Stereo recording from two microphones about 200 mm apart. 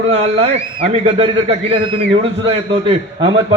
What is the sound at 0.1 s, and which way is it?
A man's voice, 30° right (ahead or behind).